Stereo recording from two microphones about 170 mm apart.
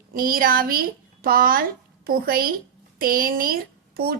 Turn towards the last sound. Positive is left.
turn(degrees=-60)  # may be behind; listen again after turning